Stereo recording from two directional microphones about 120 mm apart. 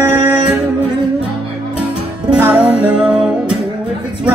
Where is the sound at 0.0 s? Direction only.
15° right (ahead or behind).